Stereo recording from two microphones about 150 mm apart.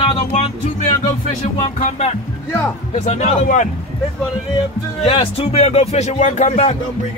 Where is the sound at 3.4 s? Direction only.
55° left (ahead or behind).